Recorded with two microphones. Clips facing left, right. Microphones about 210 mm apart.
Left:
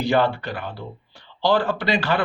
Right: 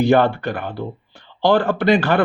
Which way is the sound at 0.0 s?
55° right (ahead or behind).